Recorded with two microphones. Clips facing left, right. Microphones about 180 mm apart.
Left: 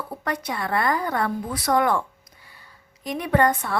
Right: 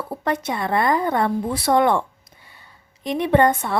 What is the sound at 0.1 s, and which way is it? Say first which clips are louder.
A woman's voice: right 6 dB; 25° right (ahead or behind).